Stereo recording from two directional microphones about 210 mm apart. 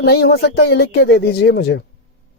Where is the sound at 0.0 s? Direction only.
55° left (ahead or behind).